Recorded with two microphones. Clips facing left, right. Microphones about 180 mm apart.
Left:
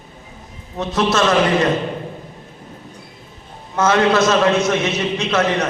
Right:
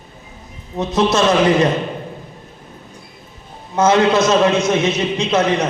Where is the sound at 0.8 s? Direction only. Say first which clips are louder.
Right 3 dB; 20° right (ahead or behind).